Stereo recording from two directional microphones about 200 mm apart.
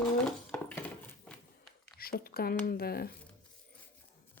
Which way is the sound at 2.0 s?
50° left (ahead or behind).